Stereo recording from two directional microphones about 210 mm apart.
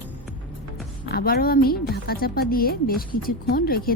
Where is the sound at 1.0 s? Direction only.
45° left (ahead or behind).